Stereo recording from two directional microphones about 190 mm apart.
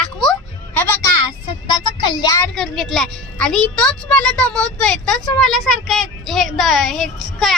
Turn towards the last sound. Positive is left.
turn(degrees=0)  # may be behind; listen again after turning